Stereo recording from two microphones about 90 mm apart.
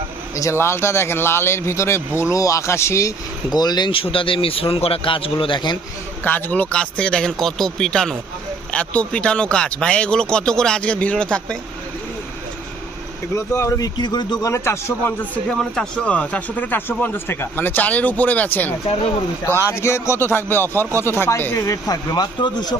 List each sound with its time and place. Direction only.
0.3 s speech: 35° left (ahead or behind)
3.5 s speech: 50° left (ahead or behind)
3.9 s a man's voice: 85° left; by 5.7 s 60° left (ahead or behind)
6.2 s speech: 20° left (ahead or behind)
13.3 s speech: 30° left (ahead or behind); by 14.3 s 55° left (ahead or behind)
14.4 s speech: 30° left (ahead or behind)
15.4 s speech: 5° left (ahead or behind); by 21.9 s 35° left (ahead or behind)
22.1 s speech: 50° left (ahead or behind)